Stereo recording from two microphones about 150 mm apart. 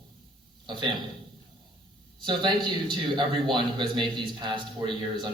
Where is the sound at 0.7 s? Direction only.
35° right (ahead or behind).